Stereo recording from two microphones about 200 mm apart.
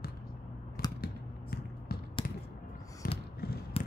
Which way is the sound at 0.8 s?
50° left (ahead or behind).